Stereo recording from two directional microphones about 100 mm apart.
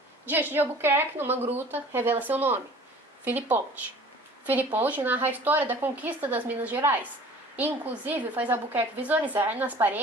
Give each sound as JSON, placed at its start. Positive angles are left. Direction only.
{"t": 0.3, "sound": "a woman's voice", "side_deg": -20}